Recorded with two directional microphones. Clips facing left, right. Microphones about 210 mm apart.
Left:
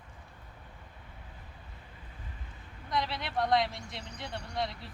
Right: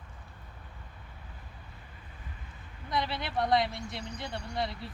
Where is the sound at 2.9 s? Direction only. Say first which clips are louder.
Right 1 dB; centre (ahead or behind).